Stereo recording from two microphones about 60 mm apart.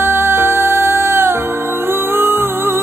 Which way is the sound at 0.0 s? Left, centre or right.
Right.